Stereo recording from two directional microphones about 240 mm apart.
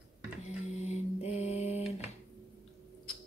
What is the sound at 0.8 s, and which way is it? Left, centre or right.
Mantra, left.